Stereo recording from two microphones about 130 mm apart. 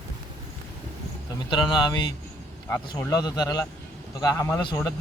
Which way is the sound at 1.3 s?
35° left (ahead or behind).